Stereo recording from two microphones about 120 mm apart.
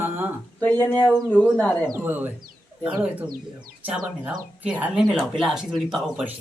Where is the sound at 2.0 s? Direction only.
15° right (ahead or behind).